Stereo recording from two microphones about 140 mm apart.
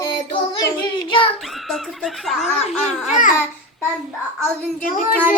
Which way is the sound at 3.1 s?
70° left (ahead or behind).